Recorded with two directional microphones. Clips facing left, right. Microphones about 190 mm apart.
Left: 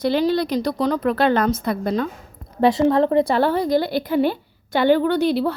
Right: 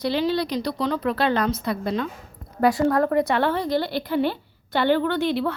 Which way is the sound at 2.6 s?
25° left (ahead or behind).